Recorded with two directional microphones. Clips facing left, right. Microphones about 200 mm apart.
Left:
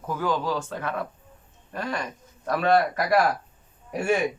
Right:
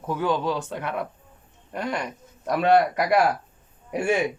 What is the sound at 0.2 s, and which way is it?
A man's voice, 20° right (ahead or behind).